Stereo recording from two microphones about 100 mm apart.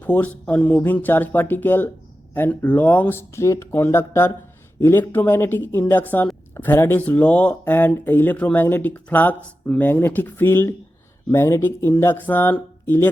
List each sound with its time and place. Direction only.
0.0 s speech: 15° left (ahead or behind)